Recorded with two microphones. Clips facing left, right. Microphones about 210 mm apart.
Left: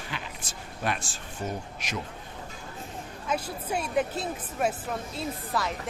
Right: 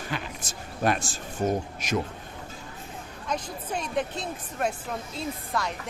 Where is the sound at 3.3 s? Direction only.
10° left (ahead or behind).